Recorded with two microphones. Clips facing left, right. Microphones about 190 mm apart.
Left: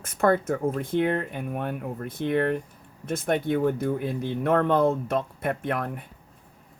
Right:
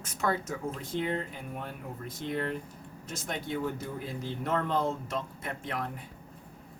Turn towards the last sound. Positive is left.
turn(degrees=60)  # may be behind; listen again after turning